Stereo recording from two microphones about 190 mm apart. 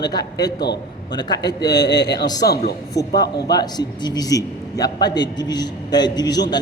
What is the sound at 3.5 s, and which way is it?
A man's voice, 20° left (ahead or behind).